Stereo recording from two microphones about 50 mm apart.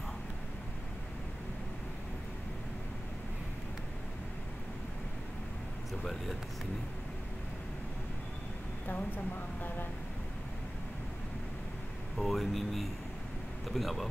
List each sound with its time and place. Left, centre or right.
8.8 s speech: left
12.2 s speech: centre